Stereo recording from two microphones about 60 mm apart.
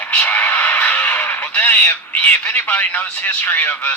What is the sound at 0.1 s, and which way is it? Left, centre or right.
Speech, left.